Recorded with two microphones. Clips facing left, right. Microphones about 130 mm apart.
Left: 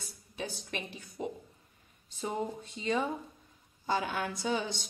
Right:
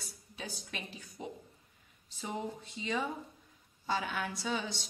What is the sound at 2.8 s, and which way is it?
A woman's voice, 45° left (ahead or behind).